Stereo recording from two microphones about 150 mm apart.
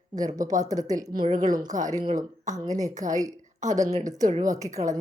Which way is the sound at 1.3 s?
55° right (ahead or behind).